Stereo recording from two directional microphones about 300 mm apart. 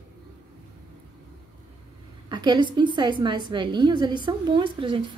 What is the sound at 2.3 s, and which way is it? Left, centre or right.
Speech, centre.